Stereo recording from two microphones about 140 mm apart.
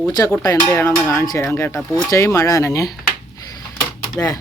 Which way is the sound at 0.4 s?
25° left (ahead or behind).